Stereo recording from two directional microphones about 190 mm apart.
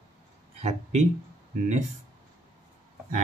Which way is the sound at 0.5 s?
35° right (ahead or behind).